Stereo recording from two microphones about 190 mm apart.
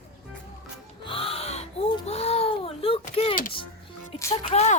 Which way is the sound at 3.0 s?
30° left (ahead or behind).